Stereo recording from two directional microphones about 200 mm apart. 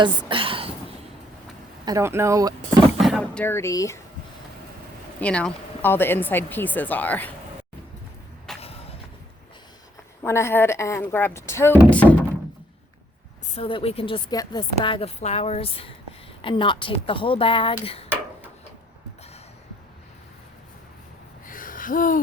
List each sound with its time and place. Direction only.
0.0 s speech: 25° right (ahead or behind)
1.8 s speech: 15° right (ahead or behind)
3.0 s speech: centre (ahead or behind)
5.2 s speech: 5° left (ahead or behind)
8.6 s a sound: 30° left (ahead or behind)
10.2 s speech: 10° left (ahead or behind)
13.6 s a woman's voice: 25° left (ahead or behind)
21.4 s a sound: 45° left (ahead or behind)